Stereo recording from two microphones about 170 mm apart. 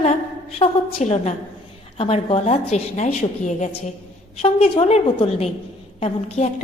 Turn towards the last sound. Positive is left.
turn(degrees=40)  # may be behind; listen again after turning